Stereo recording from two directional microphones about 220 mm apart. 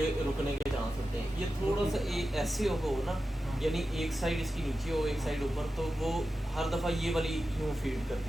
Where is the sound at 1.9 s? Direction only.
Centre (ahead or behind).